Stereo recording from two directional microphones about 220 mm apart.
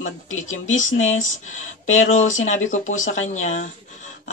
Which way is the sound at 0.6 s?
35° left (ahead or behind).